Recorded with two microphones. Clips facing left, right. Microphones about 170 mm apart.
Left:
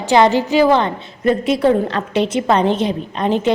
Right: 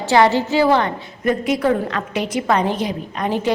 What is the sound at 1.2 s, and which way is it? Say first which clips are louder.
A woman's voice: left 3 dB; 30° left (ahead or behind).